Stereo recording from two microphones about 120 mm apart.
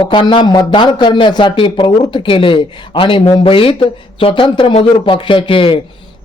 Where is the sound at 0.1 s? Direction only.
45° left (ahead or behind).